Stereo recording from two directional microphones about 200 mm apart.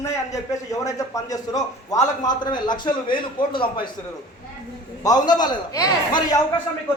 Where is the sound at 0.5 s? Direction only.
15° left (ahead or behind).